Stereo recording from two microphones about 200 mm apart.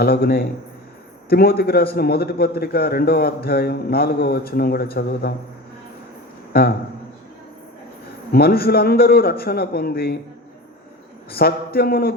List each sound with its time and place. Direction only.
0.0 s a man's voice: 50° left (ahead or behind)
6.5 s a man's voice: 50° left (ahead or behind)
8.3 s a man's voice: 50° left (ahead or behind)
11.3 s a man's voice: 50° left (ahead or behind)